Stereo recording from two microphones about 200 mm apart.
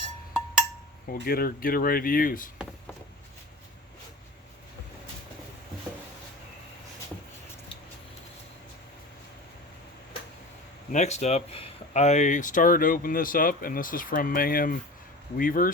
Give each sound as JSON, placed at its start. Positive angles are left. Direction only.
{"t": 1.1, "sound": "speech", "side_deg": 50}
{"t": 10.9, "sound": "speech", "side_deg": 35}